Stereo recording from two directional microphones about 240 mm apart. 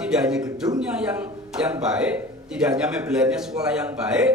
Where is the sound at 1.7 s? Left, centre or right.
Centre.